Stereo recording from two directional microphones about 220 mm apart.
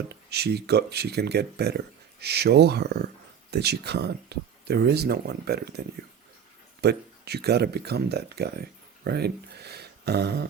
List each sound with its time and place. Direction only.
0.1 s speech: 50° right (ahead or behind)
6.8 s speech: 45° right (ahead or behind)
9.0 s a sound: 45° right (ahead or behind)